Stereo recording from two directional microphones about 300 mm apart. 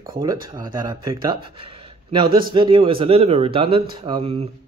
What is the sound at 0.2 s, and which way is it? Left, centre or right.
Speech, centre.